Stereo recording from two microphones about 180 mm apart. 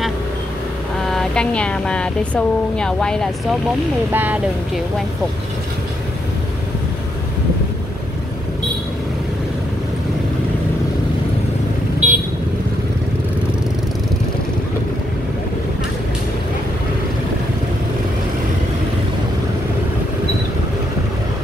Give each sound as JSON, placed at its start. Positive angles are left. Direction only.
{"t": 1.0, "sound": "speech", "side_deg": 5}
{"t": 4.1, "sound": "speech", "side_deg": -10}
{"t": 12.0, "sound": "vehicle", "side_deg": -40}